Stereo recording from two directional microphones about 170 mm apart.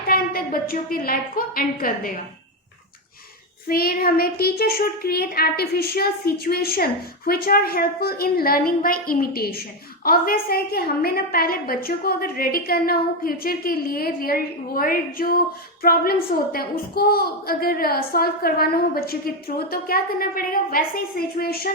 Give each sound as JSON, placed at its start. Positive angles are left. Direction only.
{"t": 0.1, "sound": "a woman's voice", "side_deg": 60}
{"t": 3.7, "sound": "a child's voice", "side_deg": 60}